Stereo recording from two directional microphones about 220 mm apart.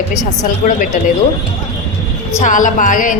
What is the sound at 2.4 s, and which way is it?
Speech, 35° left (ahead or behind).